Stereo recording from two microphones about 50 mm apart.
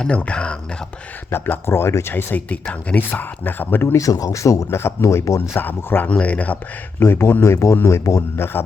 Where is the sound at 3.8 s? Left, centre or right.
Left.